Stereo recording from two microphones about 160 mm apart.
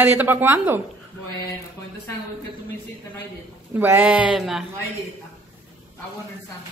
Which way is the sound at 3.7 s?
10° right (ahead or behind).